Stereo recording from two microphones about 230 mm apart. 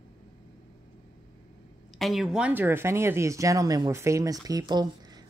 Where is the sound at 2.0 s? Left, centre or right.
Centre.